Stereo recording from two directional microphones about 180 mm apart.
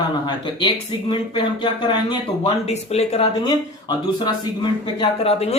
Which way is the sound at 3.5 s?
25° left (ahead or behind).